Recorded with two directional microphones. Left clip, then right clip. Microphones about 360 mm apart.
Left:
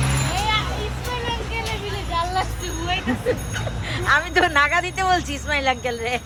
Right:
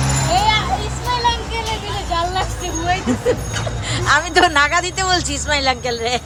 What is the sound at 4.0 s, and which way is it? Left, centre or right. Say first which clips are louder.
A woman's voice: right 4 dB; centre.